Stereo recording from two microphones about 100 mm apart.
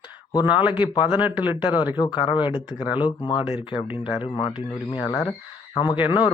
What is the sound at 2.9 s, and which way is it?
Speech, 50° left (ahead or behind).